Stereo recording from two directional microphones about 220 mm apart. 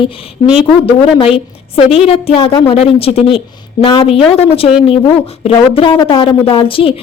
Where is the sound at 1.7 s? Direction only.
25° left (ahead or behind).